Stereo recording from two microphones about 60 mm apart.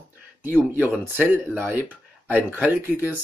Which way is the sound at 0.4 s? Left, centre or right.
Right.